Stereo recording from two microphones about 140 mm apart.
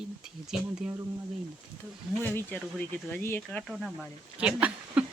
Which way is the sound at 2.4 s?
10° left (ahead or behind).